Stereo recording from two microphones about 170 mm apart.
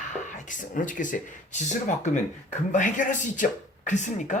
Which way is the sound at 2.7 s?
50° left (ahead or behind).